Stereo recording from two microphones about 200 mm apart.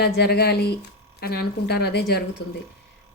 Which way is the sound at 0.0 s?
55° left (ahead or behind).